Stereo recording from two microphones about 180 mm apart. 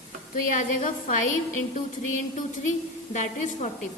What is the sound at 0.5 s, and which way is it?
Speech, 45° left (ahead or behind).